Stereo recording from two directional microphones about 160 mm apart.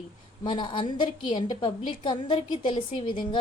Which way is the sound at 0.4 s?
30° left (ahead or behind).